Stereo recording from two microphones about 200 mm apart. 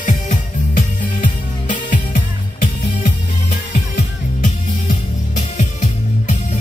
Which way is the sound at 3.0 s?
45° left (ahead or behind).